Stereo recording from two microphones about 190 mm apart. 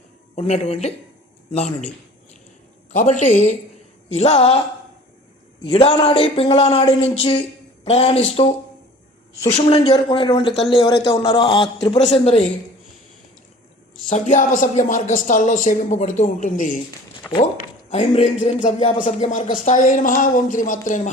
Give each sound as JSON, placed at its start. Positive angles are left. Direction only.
{"t": 0.3, "sound": "a woman's voice", "side_deg": 35}
{"t": 2.9, "sound": "a woman's voice", "side_deg": 40}
{"t": 5.7, "sound": "a woman's voice", "side_deg": 30}
{"t": 14.1, "sound": "a woman's voice", "side_deg": 40}
{"t": 18.9, "sound": "speech", "side_deg": 45}